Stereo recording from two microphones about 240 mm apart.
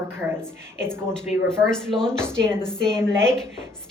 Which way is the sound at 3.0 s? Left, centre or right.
Centre.